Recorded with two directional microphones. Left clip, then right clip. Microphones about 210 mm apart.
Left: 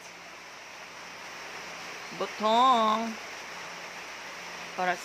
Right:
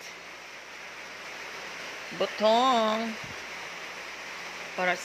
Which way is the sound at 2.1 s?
Centre (ahead or behind).